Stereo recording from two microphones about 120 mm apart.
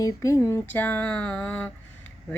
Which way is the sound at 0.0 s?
30° left (ahead or behind).